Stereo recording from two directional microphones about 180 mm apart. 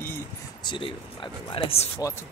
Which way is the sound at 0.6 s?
25° left (ahead or behind).